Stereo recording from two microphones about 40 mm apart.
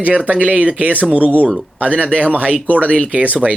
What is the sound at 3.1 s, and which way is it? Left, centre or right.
Speech, right.